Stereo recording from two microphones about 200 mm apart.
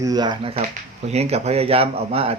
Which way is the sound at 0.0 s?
20° right (ahead or behind).